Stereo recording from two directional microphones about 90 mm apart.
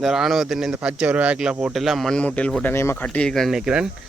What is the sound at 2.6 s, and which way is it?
Speech, 25° left (ahead or behind).